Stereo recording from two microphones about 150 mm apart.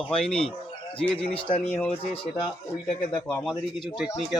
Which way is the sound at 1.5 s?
40° left (ahead or behind).